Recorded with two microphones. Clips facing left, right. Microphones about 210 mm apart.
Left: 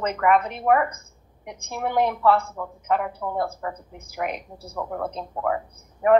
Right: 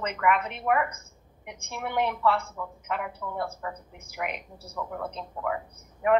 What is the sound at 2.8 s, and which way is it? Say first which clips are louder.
A woman's voice: left 9 dB; 35° left (ahead or behind).